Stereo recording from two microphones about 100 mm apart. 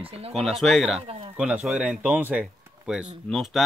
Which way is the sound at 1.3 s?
10° right (ahead or behind).